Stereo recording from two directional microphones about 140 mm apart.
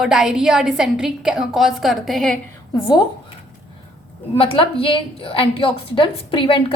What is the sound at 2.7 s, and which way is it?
Speech, 30° left (ahead or behind).